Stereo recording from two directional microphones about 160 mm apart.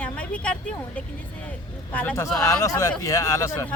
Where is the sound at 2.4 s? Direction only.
20° left (ahead or behind).